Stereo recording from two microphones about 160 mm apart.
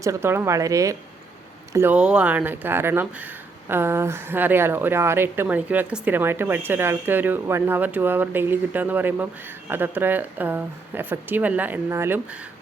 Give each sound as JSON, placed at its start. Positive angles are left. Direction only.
{"t": 0.0, "sound": "a woman's voice", "side_deg": -15}